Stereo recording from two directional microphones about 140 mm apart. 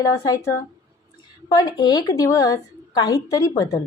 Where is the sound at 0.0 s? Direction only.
20° left (ahead or behind).